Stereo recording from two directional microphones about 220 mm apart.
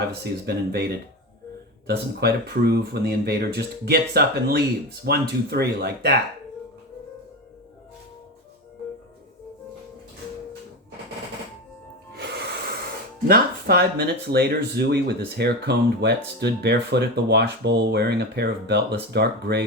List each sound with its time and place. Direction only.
0.1 s speech: 45° right (ahead or behind)
12.1 s music: 50° right (ahead or behind)
13.2 s speech: 45° right (ahead or behind)